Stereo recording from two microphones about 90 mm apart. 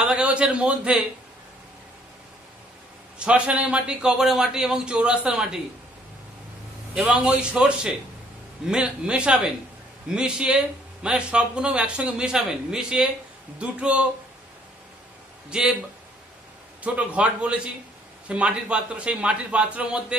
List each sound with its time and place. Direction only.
0.0 s a man's voice: 10° right (ahead or behind)
3.2 s speech: 10° right (ahead or behind)
7.0 s speech: 10° right (ahead or behind)
15.5 s speech: 10° right (ahead or behind)
16.8 s speech: 15° right (ahead or behind)